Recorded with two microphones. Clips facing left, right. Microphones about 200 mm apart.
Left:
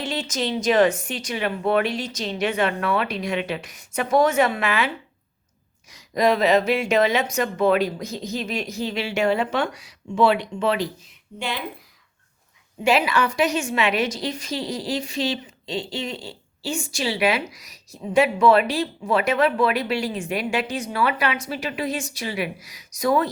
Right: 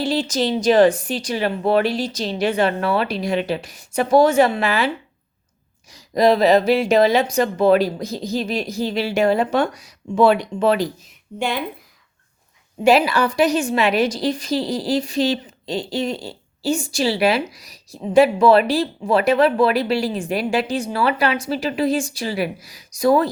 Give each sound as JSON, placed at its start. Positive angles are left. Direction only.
{"t": 0.0, "sound": "a woman's voice", "side_deg": -35}
{"t": 5.9, "sound": "a woman's voice", "side_deg": -35}
{"t": 12.8, "sound": "a woman's voice", "side_deg": -35}